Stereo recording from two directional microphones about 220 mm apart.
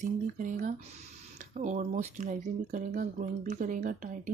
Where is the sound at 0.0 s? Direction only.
35° right (ahead or behind).